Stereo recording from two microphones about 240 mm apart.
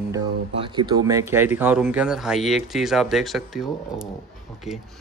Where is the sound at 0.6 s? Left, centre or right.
Centre.